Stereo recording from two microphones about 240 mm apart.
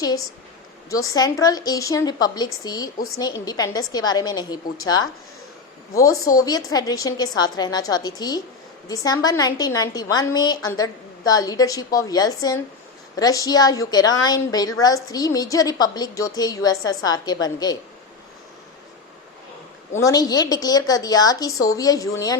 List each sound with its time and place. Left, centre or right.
1.0 s a woman's voice: centre
5.9 s a woman's voice: centre
20.0 s a woman's voice: centre